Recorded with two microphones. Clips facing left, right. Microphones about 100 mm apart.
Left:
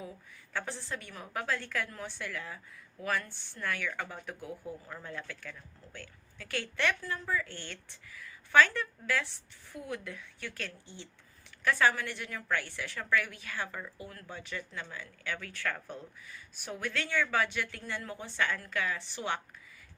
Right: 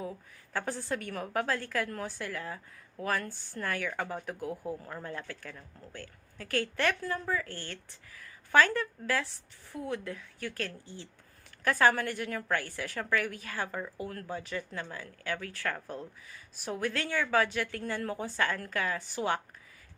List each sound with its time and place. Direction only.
0.5 s speech: 45° right (ahead or behind)